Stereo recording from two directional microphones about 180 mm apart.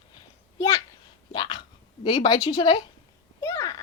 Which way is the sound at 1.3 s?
25° left (ahead or behind).